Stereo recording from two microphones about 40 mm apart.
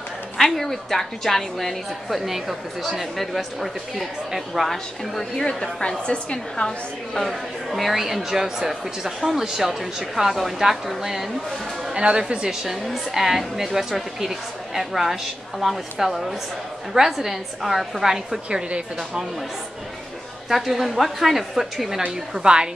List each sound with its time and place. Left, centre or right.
0.4 s a woman's voice: centre
5.4 s a woman's voice: centre
7.2 s speech: centre
12.2 s a woman's voice: right
12.4 s a woman's voice: centre
18.5 s a woman's voice: right
20.4 s a woman's voice: centre
22.0 s a woman's voice: right